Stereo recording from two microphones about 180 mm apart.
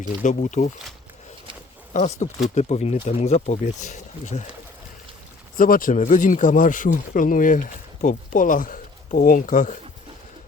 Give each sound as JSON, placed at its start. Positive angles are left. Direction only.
{"t": 0.0, "sound": "speech", "side_deg": 45}
{"t": 1.9, "sound": "speech", "side_deg": 40}
{"t": 5.5, "sound": "speech", "side_deg": 50}